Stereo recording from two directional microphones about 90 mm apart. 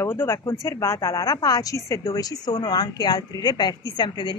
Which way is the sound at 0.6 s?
35° left (ahead or behind).